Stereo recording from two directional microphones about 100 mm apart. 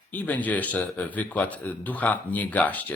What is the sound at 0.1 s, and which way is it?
Speech, 15° left (ahead or behind).